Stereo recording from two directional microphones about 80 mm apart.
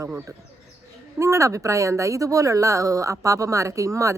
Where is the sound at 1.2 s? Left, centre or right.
Right.